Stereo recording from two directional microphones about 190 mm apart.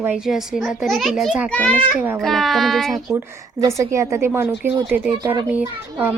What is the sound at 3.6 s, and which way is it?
Speech, 15° right (ahead or behind).